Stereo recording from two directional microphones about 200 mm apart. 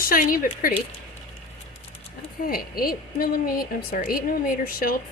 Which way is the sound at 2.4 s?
45° left (ahead or behind).